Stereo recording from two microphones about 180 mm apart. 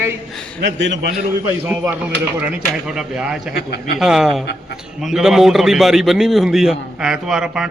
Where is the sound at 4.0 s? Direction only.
5° right (ahead or behind).